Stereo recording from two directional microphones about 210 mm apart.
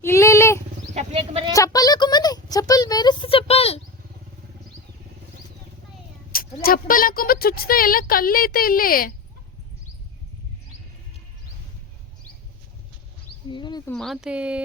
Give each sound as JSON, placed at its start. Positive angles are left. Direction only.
{"t": 0.0, "sound": "wild animals", "side_deg": 15}
{"t": 0.9, "sound": "wild animals", "side_deg": -25}
{"t": 1.5, "sound": "a sound", "side_deg": 15}
{"t": 6.3, "sound": "speech", "side_deg": 45}
{"t": 13.5, "sound": "a sound", "side_deg": 20}
{"t": 13.9, "sound": "speech", "side_deg": 0}